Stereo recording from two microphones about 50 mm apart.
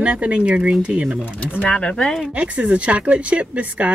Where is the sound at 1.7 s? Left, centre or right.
Centre.